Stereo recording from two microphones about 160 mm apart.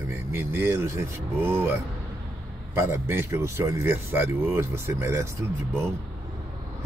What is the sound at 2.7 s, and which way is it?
Speech, 15° right (ahead or behind).